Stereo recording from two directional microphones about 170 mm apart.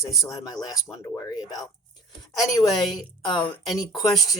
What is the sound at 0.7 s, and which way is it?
Speech, 20° left (ahead or behind).